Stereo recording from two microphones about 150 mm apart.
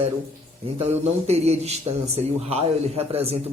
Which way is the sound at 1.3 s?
45° right (ahead or behind).